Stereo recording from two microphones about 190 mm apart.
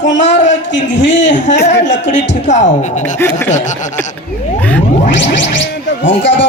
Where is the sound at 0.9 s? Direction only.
75° left (ahead or behind).